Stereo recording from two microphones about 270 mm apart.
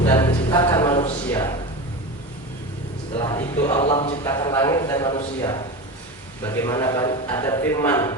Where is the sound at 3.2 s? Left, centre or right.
Centre.